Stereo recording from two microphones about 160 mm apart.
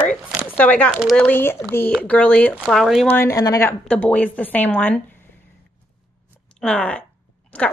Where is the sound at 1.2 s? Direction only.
15° left (ahead or behind).